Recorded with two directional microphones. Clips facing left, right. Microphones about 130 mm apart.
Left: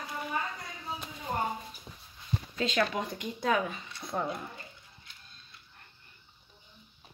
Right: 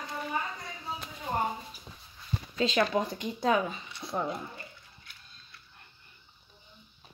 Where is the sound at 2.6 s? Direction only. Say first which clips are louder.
Right 3 dB; 30° right (ahead or behind).